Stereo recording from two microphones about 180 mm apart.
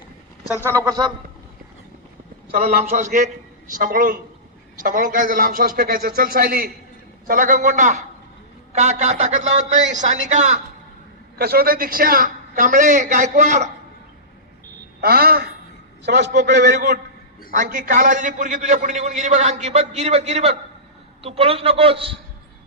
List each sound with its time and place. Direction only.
0.4 s a man's voice: 15° right (ahead or behind)
2.5 s a man's voice: 50° right (ahead or behind)
11.3 s a man's voice: 60° right (ahead or behind)
15.0 s speech: 60° right (ahead or behind)
16.0 s a man's voice: 70° right (ahead or behind)
16.7 s a man's voice: 45° right (ahead or behind)